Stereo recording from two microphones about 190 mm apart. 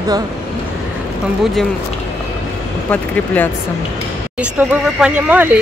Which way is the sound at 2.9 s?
10° left (ahead or behind).